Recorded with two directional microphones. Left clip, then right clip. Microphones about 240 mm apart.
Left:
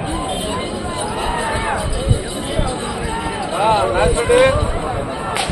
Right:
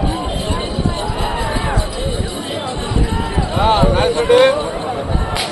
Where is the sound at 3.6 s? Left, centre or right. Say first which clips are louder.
Right 1 dB; right.